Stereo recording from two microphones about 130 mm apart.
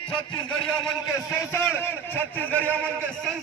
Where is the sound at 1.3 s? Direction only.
20° left (ahead or behind).